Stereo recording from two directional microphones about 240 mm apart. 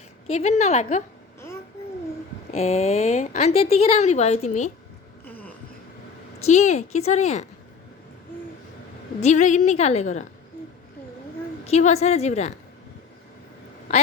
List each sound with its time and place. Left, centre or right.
0.3 s a woman's voice: left
2.5 s a woman's voice: left
5.2 s a sound: centre
6.5 s a woman's voice: left
9.2 s a woman's voice: left
11.6 s a woman's voice: left
13.9 s speech: left